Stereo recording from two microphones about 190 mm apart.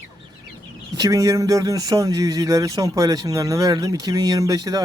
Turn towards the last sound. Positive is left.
turn(degrees=-20)  # may be behind; listen again after turning